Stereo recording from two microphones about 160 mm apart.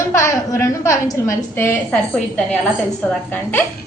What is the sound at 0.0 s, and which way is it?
A woman's voice, 15° left (ahead or behind).